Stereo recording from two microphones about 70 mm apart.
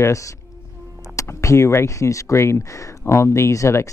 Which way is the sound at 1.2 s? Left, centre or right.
Left.